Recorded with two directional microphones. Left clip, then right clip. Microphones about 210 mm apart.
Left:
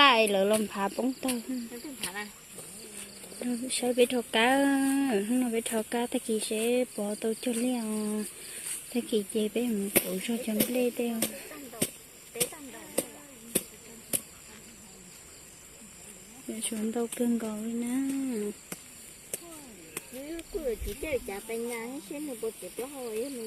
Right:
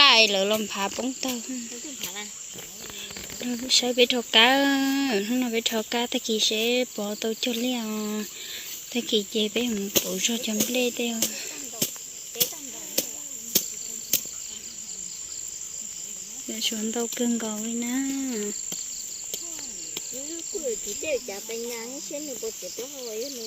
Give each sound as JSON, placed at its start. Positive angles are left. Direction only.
{"t": 0.0, "sound": "speech", "side_deg": 10}
{"t": 3.4, "sound": "speech", "side_deg": 0}
{"t": 11.8, "sound": "cricket", "side_deg": 25}
{"t": 16.5, "sound": "speech", "side_deg": 0}
{"t": 20.8, "sound": "speech", "side_deg": 20}